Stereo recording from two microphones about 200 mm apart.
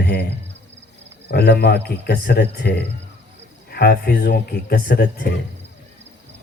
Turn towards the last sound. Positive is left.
turn(degrees=50)  # may be behind; listen again after turning